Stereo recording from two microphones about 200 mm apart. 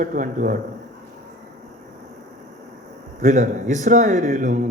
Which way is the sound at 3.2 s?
40° right (ahead or behind).